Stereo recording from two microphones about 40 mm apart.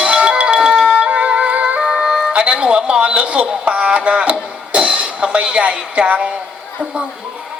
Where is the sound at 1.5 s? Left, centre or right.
Right.